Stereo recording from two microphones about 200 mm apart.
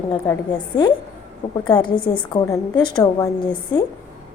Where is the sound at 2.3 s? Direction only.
15° left (ahead or behind).